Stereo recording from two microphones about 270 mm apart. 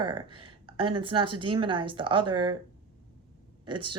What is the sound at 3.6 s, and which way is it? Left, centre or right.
Speech, centre.